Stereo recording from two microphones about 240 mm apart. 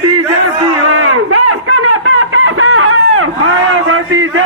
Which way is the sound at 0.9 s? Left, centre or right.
Right.